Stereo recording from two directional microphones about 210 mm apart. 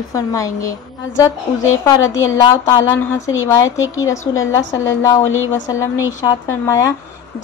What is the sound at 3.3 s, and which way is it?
Speech, 70° left (ahead or behind).